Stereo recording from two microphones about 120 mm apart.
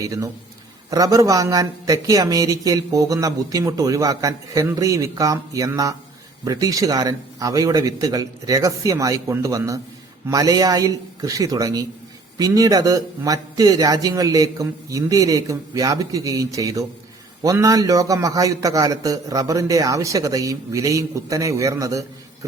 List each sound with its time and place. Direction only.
0.0 s speech: 30° right (ahead or behind)